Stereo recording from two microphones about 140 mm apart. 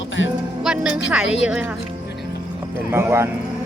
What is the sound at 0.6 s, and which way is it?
A woman's voice, 5° right (ahead or behind).